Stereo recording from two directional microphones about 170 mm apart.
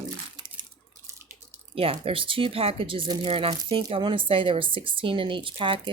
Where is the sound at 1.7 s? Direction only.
35° right (ahead or behind).